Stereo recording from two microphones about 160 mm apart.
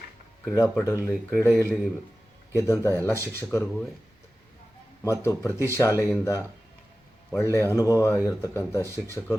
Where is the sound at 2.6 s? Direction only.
15° left (ahead or behind).